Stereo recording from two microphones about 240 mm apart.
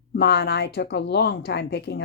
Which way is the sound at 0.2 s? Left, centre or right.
Left.